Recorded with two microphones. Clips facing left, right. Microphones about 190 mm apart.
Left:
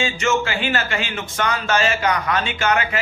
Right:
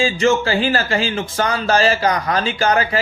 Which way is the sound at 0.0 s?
35° right (ahead or behind).